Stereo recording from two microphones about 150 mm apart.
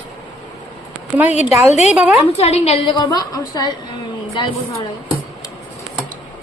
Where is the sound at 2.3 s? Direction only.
45° left (ahead or behind).